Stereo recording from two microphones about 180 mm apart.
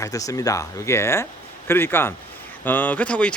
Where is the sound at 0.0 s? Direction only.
20° left (ahead or behind).